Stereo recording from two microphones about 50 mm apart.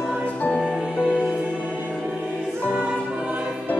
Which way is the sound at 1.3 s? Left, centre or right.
Centre.